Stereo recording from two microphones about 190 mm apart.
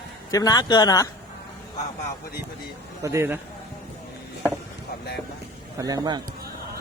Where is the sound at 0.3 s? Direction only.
20° left (ahead or behind).